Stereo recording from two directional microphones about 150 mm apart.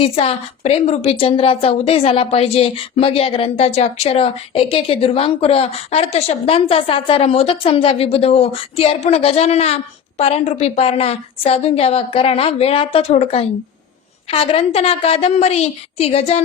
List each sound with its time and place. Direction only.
0.0 s a woman's voice: 40° left (ahead or behind)